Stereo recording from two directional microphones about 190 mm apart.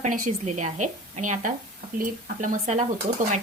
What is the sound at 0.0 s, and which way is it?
A woman's voice, 40° right (ahead or behind).